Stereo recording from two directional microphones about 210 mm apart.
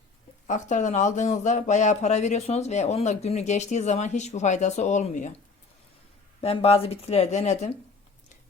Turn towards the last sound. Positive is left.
turn(degrees=30)  # may be behind; listen again after turning